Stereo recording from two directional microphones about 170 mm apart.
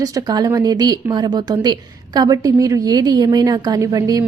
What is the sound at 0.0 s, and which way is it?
A woman's voice, 25° right (ahead or behind).